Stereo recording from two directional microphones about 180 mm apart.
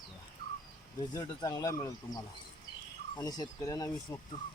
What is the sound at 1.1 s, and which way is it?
Speech, 20° left (ahead or behind).